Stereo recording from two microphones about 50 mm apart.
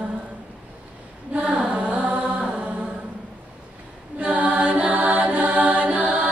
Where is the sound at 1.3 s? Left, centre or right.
Right.